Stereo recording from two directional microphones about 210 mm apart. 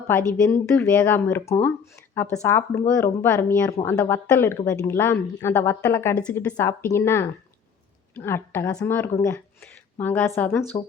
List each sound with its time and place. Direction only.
0.3 s speech: 15° left (ahead or behind)